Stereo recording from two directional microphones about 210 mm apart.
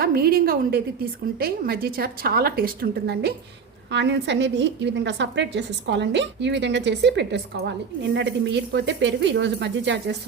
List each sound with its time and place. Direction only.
0.0 s a woman's voice: 45° right (ahead or behind)